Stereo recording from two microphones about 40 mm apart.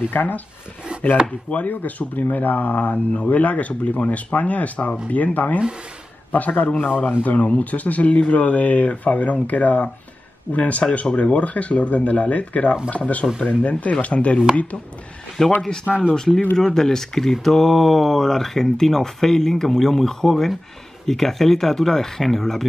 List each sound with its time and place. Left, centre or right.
0.1 s speech: left
1.5 s speech: left
15.4 s speech: centre